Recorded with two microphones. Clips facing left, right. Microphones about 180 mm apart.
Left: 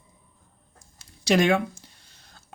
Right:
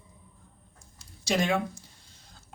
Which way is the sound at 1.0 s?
75° left (ahead or behind).